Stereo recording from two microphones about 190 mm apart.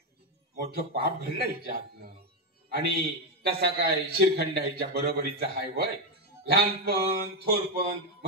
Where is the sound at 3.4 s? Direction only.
55° right (ahead or behind).